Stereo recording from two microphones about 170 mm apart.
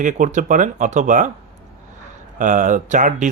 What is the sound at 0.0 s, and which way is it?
Speech, 50° right (ahead or behind).